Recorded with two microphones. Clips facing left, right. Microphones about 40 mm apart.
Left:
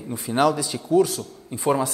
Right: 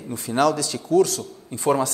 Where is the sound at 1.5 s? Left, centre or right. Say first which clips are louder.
Right 1 dB; centre.